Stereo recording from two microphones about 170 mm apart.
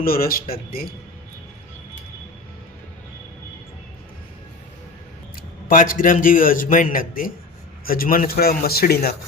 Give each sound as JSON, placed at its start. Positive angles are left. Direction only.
{"t": 0.0, "sound": "speech", "side_deg": 60}
{"t": 5.6, "sound": "a man's voice", "side_deg": 55}